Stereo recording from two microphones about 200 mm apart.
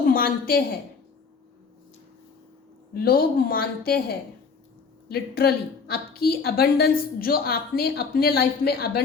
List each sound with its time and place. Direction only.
0.1 s a woman's voice: 50° left (ahead or behind)
2.9 s a woman's voice: 50° left (ahead or behind)
5.0 s a woman's voice: 50° left (ahead or behind)